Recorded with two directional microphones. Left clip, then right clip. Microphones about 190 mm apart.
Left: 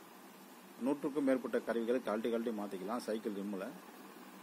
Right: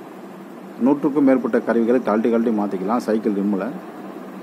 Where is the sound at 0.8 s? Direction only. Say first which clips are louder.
Right 18 dB; 25° left (ahead or behind).